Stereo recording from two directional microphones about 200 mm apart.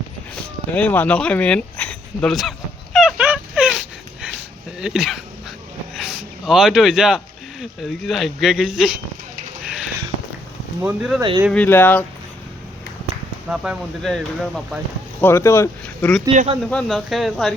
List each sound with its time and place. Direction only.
0.8 s a sound: 5° left (ahead or behind)
4.8 s speech: centre (ahead or behind)
5.9 s a sound: centre (ahead or behind)
7.6 s speech: centre (ahead or behind)
10.8 s speech: 5° right (ahead or behind)
11.2 s speech: 20° right (ahead or behind)
11.5 s speech: 10° left (ahead or behind)
13.5 s speech: 5° right (ahead or behind)
15.2 s speech: 10° left (ahead or behind)
16.3 s speech: 35° right (ahead or behind)
16.6 s speech: centre (ahead or behind)